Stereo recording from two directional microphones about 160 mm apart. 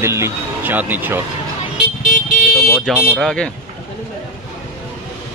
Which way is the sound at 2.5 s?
5° left (ahead or behind).